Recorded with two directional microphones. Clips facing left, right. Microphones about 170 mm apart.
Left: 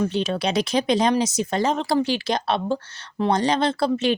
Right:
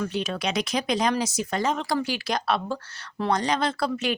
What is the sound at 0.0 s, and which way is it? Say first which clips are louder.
Speech: left 5 dB; 25° left (ahead or behind).